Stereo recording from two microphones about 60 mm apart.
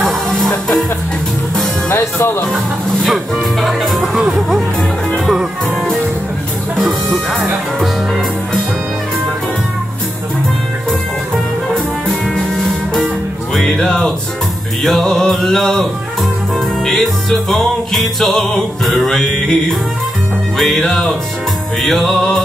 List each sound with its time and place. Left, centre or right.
0.3 s music: centre
1.9 s speech: left
2.5 s speech: centre
3.6 s music: centre
6.9 s music: centre
12.4 s music: centre